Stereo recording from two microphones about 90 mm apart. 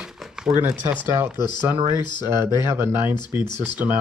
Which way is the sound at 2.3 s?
30° right (ahead or behind).